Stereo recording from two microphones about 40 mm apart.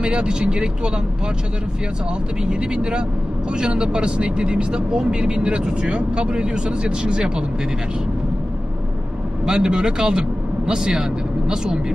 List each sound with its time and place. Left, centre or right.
0.0 s speech: right
2.4 s speech: right
9.5 s speech: centre